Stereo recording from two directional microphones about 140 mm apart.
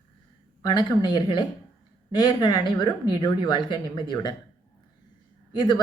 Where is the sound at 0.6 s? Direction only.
35° left (ahead or behind).